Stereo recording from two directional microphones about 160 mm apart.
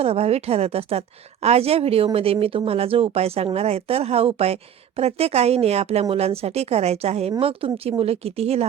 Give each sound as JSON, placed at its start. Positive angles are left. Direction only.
{"t": 0.0, "sound": "a woman's voice", "side_deg": -40}